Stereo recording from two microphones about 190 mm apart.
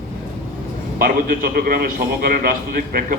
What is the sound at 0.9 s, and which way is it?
A man's voice, 50° right (ahead or behind).